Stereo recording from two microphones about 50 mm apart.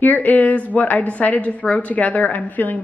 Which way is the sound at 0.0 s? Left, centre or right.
Left.